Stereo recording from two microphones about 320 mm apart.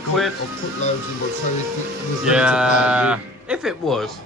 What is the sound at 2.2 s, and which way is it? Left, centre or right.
Speech, centre.